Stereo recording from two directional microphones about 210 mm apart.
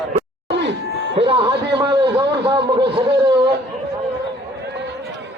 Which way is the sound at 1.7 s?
20° right (ahead or behind).